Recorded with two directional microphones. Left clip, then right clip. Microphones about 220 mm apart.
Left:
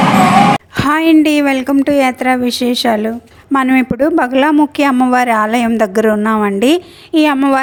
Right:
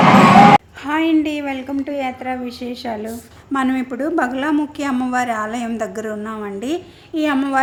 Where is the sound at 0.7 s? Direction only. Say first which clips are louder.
Left 7 dB; 45° left (ahead or behind).